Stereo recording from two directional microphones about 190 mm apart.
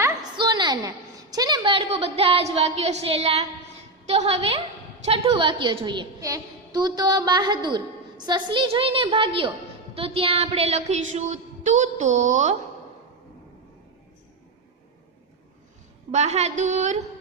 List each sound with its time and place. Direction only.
0.3 s a woman's voice: 25° right (ahead or behind); by 12.5 s 40° right (ahead or behind)
16.1 s a woman's voice: 35° right (ahead or behind)